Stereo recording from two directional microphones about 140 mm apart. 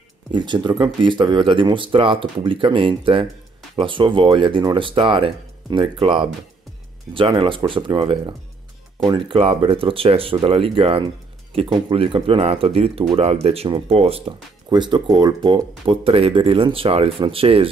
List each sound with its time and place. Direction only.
0.3 s speech: 35° right (ahead or behind)
14.7 s speech: 35° right (ahead or behind)